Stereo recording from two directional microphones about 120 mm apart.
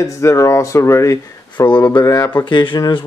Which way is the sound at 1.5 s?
40° left (ahead or behind).